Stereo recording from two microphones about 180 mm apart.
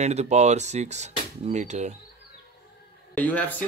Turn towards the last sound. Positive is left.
turn(degrees=10)  # may be behind; listen again after turning